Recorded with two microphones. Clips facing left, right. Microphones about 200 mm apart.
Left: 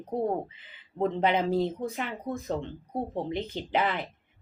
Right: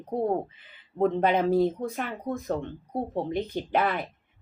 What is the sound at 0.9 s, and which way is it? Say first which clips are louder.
Speech: right 3 dB; 50° right (ahead or behind).